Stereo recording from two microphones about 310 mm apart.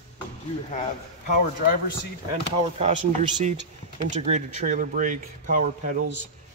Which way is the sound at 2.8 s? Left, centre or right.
Right.